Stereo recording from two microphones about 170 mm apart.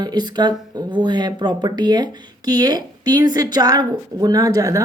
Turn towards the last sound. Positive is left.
turn(degrees=-20)  # may be behind; listen again after turning